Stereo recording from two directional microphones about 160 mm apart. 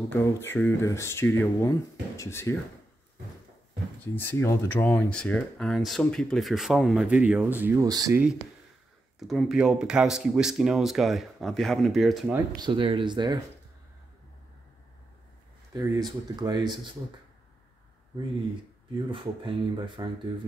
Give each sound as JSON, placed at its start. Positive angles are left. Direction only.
{"t": 0.1, "sound": "speech", "side_deg": 15}
{"t": 4.0, "sound": "speech", "side_deg": 10}
{"t": 9.3, "sound": "speech", "side_deg": 0}
{"t": 12.5, "sound": "speech", "side_deg": -30}
{"t": 15.7, "sound": "speech", "side_deg": -25}
{"t": 19.0, "sound": "speech", "side_deg": -30}